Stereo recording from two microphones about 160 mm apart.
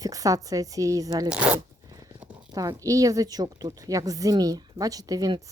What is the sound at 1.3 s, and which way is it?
Speech, 5° right (ahead or behind).